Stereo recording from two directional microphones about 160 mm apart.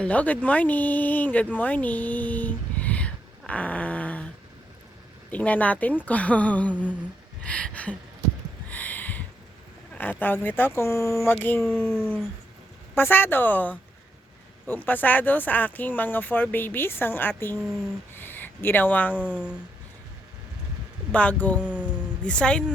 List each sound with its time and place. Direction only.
0.0 s speech: 10° left (ahead or behind)
5.3 s speech: 10° left (ahead or behind)
7.4 s a sound: 5° left (ahead or behind)
9.9 s speech: 10° left (ahead or behind)
19.3 s speech: 5° right (ahead or behind)
21.1 s speech: 10° left (ahead or behind)